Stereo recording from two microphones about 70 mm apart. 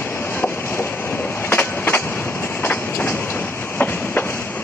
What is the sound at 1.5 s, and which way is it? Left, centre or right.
Train, left.